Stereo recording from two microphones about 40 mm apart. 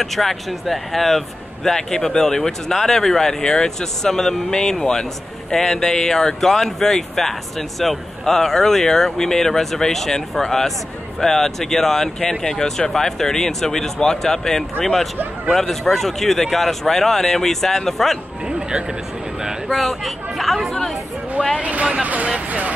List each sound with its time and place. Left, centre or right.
0.0 s speech: centre
19.7 s speech: centre
21.5 s speech: right